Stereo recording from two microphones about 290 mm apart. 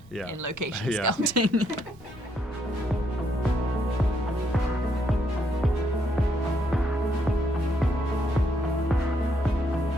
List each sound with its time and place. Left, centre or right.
1.0 s speech: right